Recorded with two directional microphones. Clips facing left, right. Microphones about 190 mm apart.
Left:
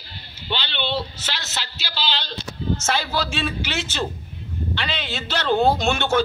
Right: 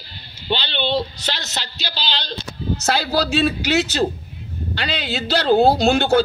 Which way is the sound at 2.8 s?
35° right (ahead or behind).